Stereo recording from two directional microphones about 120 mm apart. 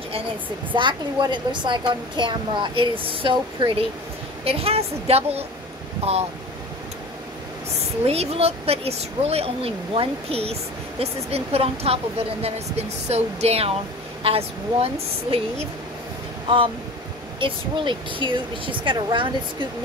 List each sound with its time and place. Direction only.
0.7 s a woman's voice: 40° right (ahead or behind); by 5.4 s 60° right (ahead or behind)
8.1 s speech: 60° right (ahead or behind)
16.4 s speech: 45° right (ahead or behind)